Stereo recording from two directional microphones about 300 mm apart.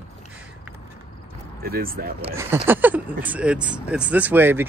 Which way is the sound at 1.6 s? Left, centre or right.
Right.